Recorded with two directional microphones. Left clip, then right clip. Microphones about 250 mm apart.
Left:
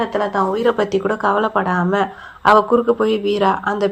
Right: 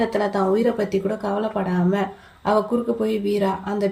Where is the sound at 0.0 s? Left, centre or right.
Centre.